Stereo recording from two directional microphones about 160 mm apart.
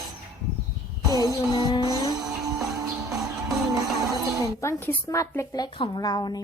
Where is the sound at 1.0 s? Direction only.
25° right (ahead or behind).